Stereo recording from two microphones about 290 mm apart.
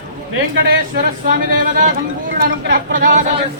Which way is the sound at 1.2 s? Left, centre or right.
Right.